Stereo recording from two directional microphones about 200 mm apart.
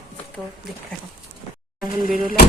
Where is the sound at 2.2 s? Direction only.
45° left (ahead or behind).